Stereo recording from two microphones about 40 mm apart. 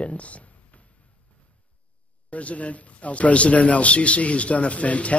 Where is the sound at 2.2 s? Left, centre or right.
Left.